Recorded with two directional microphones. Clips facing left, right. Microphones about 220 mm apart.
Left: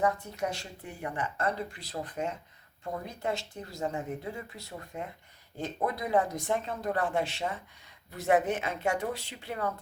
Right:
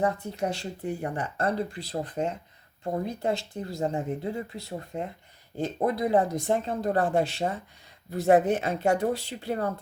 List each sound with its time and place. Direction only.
0.0 s speech: 30° right (ahead or behind)